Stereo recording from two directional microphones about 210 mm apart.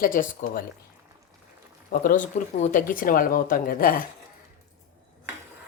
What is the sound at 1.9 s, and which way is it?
Speech, 40° left (ahead or behind).